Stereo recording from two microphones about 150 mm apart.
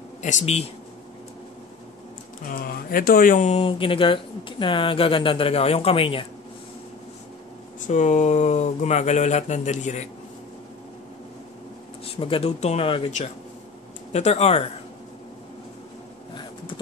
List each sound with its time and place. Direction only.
0.2 s speech: 55° left (ahead or behind)
2.4 s speech: 75° left (ahead or behind)
3.4 s speech: 40° left (ahead or behind)
7.8 s speech: 55° left (ahead or behind)
12.0 s speech: 40° left (ahead or behind)
14.1 s speech: 45° left (ahead or behind)
16.3 s a sound: 30° left (ahead or behind)